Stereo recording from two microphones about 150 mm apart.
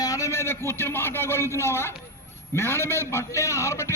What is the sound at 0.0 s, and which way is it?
A man's voice, 20° left (ahead or behind).